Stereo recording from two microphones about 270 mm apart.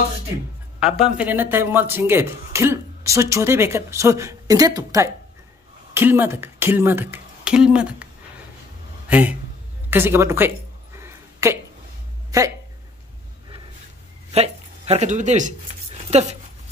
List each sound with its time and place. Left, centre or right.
0.7 s a man's voice: centre
11.0 s a sound: centre
12.3 s speech: centre
14.3 s speech: right